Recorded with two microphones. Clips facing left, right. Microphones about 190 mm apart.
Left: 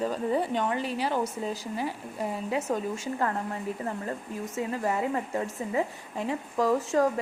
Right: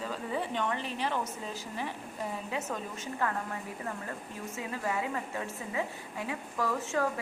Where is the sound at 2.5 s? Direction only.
35° left (ahead or behind).